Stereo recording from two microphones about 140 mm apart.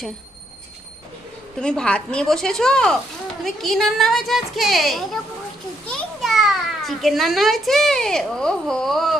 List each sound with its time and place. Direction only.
1.5 s a woman's voice: 5° left (ahead or behind)